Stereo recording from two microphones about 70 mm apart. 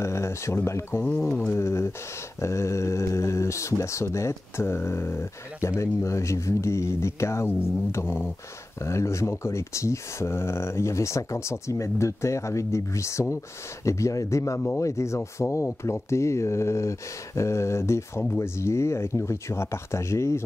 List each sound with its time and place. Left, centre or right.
0.0 s speech: left
1.0 s speech: left
1.6 s speech: left